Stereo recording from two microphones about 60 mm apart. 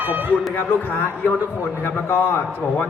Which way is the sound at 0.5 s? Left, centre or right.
Left.